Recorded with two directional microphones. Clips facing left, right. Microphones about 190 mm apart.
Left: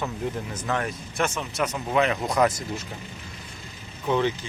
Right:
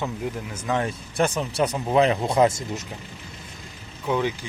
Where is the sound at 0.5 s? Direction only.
10° right (ahead or behind).